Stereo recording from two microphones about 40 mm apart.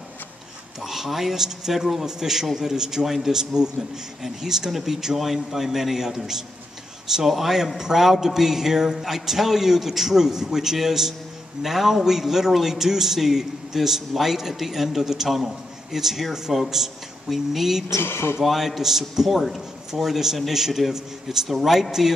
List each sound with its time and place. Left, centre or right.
0.7 s a man's voice: centre
18.0 s speech: left
18.4 s a man's voice: centre